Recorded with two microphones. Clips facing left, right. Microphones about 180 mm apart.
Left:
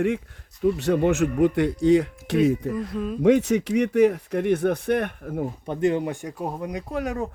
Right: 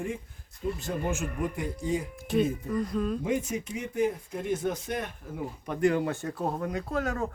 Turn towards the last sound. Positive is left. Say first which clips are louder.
# left 3 dB
turn(degrees=15)  # may be behind; listen again after turning